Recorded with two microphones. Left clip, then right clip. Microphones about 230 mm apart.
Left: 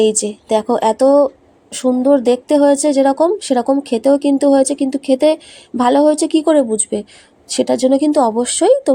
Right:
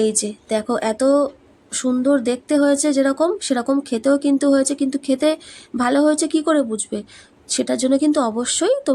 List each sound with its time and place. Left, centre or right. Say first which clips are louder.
0.0 s speech: left 6 dB; centre